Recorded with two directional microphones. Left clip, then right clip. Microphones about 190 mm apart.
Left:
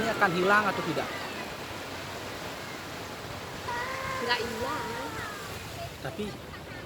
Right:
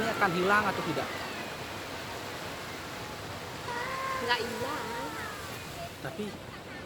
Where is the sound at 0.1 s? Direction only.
10° left (ahead or behind).